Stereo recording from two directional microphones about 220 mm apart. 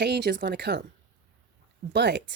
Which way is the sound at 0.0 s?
50° right (ahead or behind).